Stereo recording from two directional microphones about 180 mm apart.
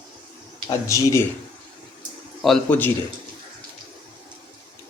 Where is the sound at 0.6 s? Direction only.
15° left (ahead or behind).